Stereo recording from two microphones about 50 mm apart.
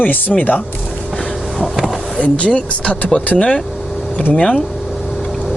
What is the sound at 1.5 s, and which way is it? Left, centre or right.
Vehicle, centre.